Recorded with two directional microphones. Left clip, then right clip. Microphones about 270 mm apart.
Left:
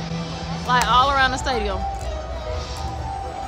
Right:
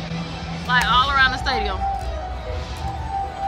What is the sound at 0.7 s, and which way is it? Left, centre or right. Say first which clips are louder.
Music: left 1 dB; left.